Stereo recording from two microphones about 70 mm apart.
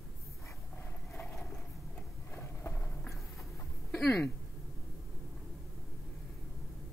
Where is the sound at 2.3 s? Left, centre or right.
Left.